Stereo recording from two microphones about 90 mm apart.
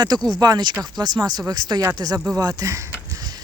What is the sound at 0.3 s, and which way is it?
Speech, 45° right (ahead or behind).